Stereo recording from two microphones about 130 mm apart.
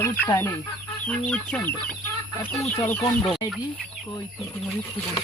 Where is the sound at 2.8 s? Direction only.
20° left (ahead or behind).